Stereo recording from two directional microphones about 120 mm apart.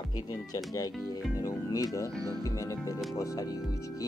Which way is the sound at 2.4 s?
25° left (ahead or behind).